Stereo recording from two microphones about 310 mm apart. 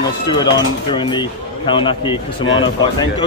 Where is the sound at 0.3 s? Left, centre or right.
Centre.